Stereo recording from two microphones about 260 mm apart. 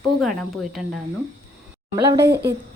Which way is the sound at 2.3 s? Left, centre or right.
Right.